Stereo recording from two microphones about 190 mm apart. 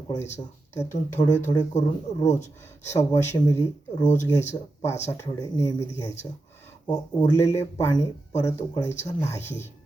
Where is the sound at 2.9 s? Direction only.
15° left (ahead or behind).